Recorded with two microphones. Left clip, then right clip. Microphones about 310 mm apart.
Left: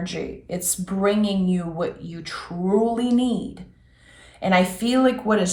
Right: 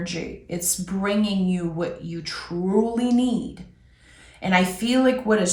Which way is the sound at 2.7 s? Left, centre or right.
Centre.